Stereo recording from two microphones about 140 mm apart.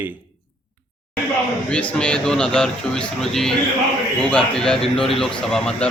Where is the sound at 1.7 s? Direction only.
5° left (ahead or behind).